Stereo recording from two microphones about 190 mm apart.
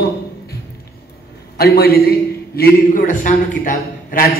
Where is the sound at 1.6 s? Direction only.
55° left (ahead or behind).